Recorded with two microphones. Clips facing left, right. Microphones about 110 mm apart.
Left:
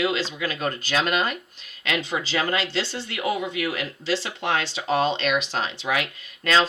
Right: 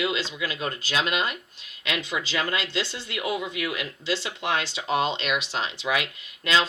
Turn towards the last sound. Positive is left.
turn(degrees=50)  # may be behind; listen again after turning